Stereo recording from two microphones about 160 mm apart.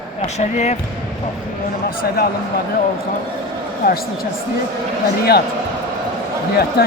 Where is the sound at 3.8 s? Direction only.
75° left (ahead or behind).